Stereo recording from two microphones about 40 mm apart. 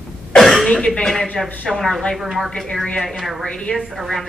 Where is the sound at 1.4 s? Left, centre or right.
Centre.